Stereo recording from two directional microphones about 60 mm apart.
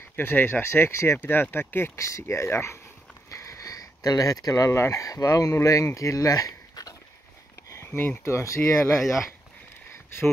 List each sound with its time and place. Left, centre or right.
0.1 s speech: left
1.2 s speech: left
2.0 s speech: left
3.3 s a sound: left
4.6 s speech: left
5.0 s speech: left
8.2 s speech: left
9.0 s speech: centre